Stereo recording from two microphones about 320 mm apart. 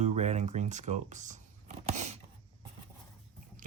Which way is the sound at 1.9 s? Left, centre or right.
Right.